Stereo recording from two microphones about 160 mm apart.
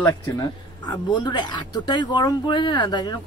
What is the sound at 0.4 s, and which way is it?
Speech, 25° left (ahead or behind).